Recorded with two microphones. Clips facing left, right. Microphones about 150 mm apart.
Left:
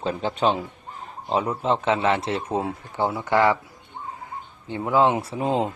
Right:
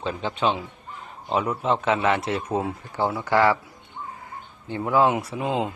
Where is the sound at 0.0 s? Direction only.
40° left (ahead or behind); by 3.6 s 20° left (ahead or behind).